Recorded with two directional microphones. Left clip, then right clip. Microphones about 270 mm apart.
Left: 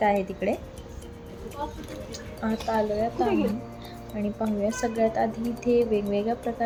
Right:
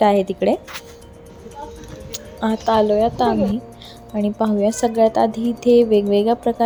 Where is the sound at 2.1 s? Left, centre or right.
Right.